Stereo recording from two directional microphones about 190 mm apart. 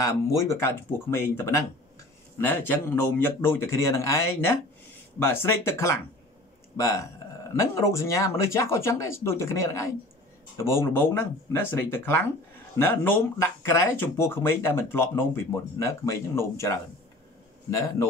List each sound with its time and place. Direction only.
0.0 s speech: 15° left (ahead or behind)